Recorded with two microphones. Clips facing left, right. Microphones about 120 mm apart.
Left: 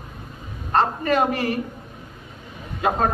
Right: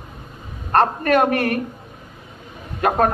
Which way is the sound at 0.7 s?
60° right (ahead or behind).